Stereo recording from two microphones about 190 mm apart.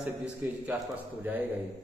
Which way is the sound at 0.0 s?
10° right (ahead or behind).